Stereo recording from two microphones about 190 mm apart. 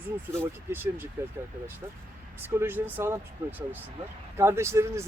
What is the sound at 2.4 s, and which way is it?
Speech, 10° right (ahead or behind).